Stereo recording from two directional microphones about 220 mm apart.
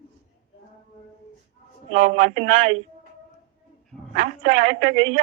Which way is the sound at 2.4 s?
65° right (ahead or behind).